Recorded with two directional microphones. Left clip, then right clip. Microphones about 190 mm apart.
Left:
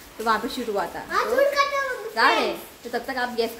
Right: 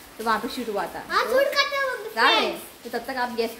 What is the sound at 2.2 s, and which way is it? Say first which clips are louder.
A woman's voice: even; centre (ahead or behind).